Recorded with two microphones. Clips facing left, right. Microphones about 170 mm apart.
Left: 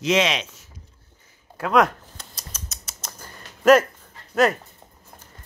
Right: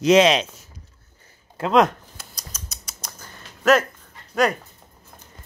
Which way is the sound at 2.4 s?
5° left (ahead or behind).